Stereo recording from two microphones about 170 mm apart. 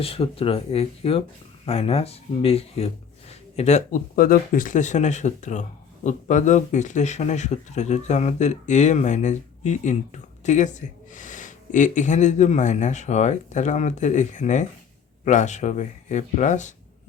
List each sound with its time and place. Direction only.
0.0 s speech: 35° left (ahead or behind)